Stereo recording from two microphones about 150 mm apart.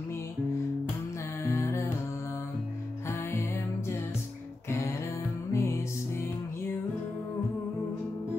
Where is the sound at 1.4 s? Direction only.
15° left (ahead or behind).